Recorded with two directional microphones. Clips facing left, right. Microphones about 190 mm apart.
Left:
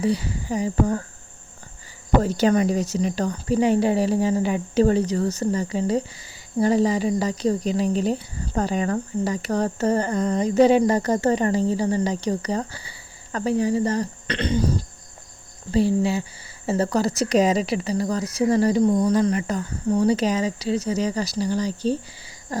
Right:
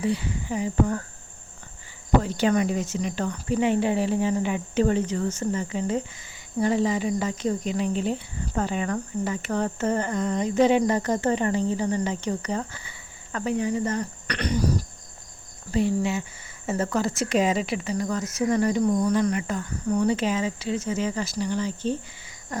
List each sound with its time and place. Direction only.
0.0 s speech: 40° left (ahead or behind)
2.2 s speech: 40° left (ahead or behind)